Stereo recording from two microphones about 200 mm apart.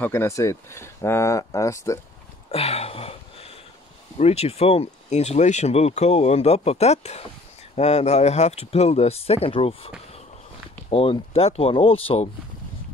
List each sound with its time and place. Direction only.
0.0 s speech: 15° left (ahead or behind)
2.5 s a sound: 30° left (ahead or behind)
4.2 s speech: 30° left (ahead or behind)